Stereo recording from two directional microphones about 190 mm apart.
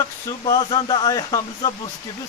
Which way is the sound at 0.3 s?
20° left (ahead or behind).